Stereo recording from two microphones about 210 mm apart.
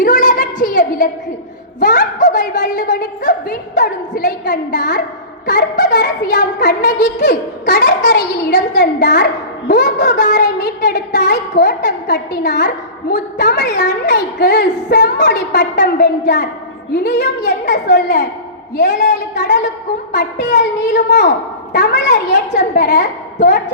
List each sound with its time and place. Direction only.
0.0 s a sound: 35° left (ahead or behind)
2.2 s a woman's voice: 55° left (ahead or behind)
3.2 s speech: 40° left (ahead or behind)
4.4 s a woman's voice: 55° left (ahead or behind)